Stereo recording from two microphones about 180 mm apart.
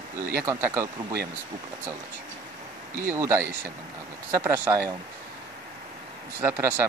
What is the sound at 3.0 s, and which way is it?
Speech, 15° right (ahead or behind).